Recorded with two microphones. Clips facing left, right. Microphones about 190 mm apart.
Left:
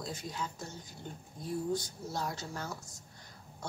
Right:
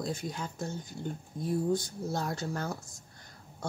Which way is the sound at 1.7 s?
50° right (ahead or behind).